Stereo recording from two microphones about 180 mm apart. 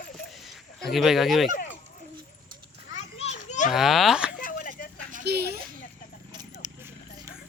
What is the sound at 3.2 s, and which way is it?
Children playing, 40° left (ahead or behind).